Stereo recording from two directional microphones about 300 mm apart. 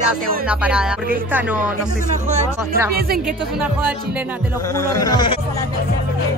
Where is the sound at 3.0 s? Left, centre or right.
Right.